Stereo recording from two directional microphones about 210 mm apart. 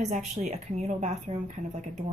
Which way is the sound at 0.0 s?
35° right (ahead or behind).